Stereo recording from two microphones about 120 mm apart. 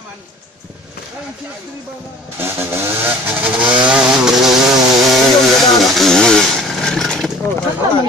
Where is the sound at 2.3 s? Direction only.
20° right (ahead or behind).